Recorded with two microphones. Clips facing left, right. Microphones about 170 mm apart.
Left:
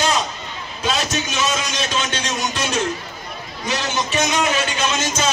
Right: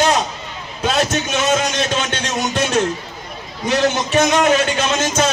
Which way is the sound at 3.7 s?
55° right (ahead or behind).